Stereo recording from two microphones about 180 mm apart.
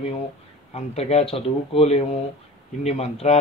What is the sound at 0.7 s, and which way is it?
Speech, 35° left (ahead or behind).